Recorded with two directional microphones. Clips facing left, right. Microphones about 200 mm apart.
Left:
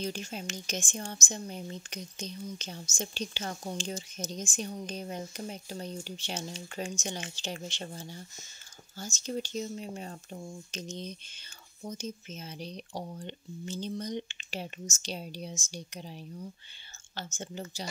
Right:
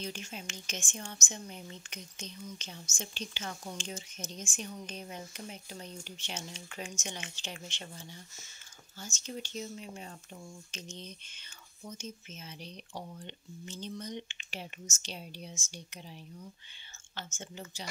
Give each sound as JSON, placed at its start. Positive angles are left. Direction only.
{"t": 0.0, "sound": "speech", "side_deg": 35}